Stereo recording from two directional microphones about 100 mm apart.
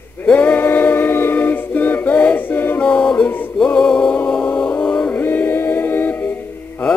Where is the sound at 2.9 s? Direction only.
10° left (ahead or behind).